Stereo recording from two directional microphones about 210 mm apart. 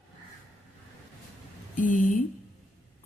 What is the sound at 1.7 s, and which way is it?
Speech, 40° left (ahead or behind).